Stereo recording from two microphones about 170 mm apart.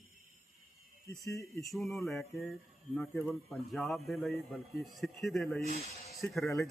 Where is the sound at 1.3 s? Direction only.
20° left (ahead or behind).